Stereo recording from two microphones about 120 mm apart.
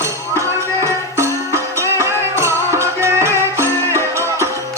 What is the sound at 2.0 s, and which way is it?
Music, 25° right (ahead or behind).